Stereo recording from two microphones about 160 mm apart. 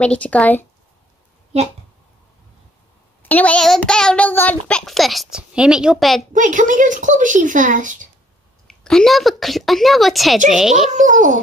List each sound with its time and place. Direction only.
0.0 s speech: 5° left (ahead or behind)
1.5 s speech: 40° right (ahead or behind)
3.2 s a child's voice: 10° left (ahead or behind)
6.3 s speech: 50° right (ahead or behind)
8.6 s a child's voice: 5° left (ahead or behind)
10.9 s speech: 50° right (ahead or behind)